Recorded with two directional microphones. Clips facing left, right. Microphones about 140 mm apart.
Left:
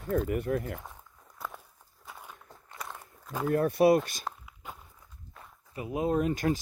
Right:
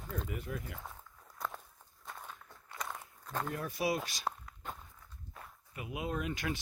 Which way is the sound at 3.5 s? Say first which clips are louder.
Left 14 dB; 55° left (ahead or behind).